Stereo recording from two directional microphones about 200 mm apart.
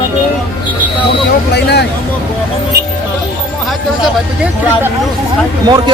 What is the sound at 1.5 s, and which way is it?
Speech, 55° left (ahead or behind).